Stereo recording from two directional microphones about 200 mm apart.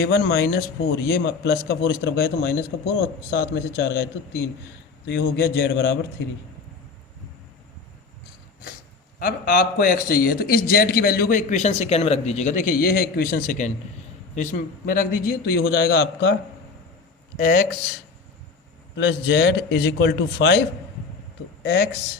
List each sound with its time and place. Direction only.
0.0 s a man's voice: 55° left (ahead or behind)
9.1 s a man's voice: 45° left (ahead or behind)
17.3 s a man's voice: 45° left (ahead or behind)
18.9 s a man's voice: 55° left (ahead or behind)